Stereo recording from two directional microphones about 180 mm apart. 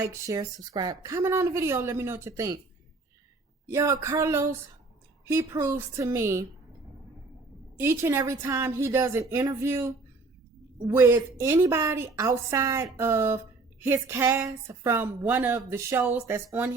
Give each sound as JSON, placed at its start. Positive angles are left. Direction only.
{"t": 0.0, "sound": "speech", "side_deg": -20}
{"t": 3.7, "sound": "speech", "side_deg": -15}
{"t": 7.8, "sound": "speech", "side_deg": -15}